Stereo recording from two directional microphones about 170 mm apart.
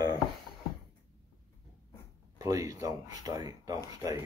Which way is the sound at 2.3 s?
20° right (ahead or behind).